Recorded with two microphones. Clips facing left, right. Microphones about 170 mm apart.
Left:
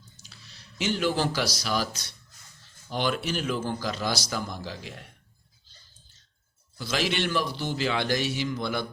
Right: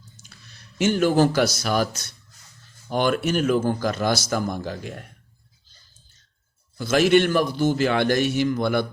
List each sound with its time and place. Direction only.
0.2 s a sound: 50° right (ahead or behind)
1.5 s speech: 55° right (ahead or behind)
6.7 s speech: 50° right (ahead or behind)